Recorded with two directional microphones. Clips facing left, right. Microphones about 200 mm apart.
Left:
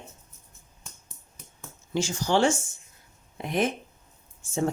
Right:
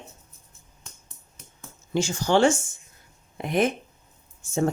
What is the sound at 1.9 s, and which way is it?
Speech, 55° right (ahead or behind).